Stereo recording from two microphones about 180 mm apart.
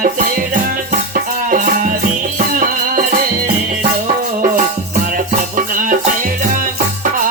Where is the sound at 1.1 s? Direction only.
50° right (ahead or behind).